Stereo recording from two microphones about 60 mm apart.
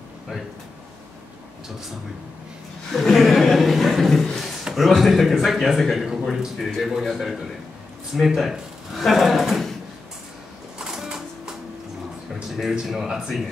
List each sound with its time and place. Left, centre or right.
2.9 s chuckle: centre
4.6 s a man's voice: centre
10.8 s a sound: centre
12.8 s speech: centre